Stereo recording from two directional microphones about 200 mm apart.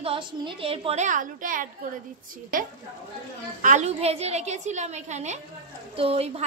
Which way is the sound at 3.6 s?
35° right (ahead or behind).